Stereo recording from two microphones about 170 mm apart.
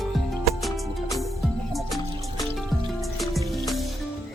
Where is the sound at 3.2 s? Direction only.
Centre (ahead or behind).